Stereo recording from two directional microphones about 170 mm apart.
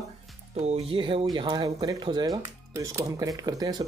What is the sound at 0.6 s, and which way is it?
Speech, 40° right (ahead or behind).